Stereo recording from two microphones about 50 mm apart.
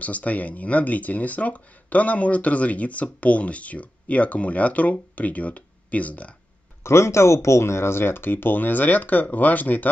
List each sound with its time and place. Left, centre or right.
0.0 s speech: left
6.8 s speech: left